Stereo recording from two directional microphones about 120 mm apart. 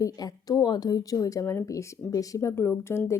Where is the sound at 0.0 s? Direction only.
30° left (ahead or behind).